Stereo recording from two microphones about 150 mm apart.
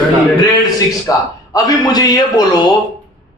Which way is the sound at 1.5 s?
25° left (ahead or behind).